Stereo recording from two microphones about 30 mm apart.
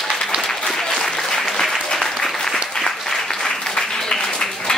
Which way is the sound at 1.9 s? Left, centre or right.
Centre.